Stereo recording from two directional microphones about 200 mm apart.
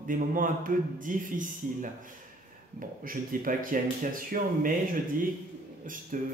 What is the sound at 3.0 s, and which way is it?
Speech, 45° right (ahead or behind).